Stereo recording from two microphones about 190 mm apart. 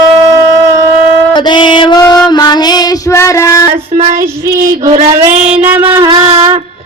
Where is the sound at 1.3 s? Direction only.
25° left (ahead or behind).